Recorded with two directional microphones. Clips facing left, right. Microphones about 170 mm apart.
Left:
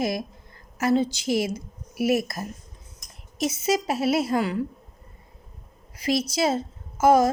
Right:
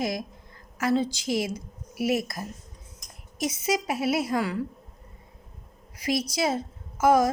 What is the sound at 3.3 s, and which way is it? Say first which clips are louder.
A woman's voice: left 3 dB; 25° left (ahead or behind).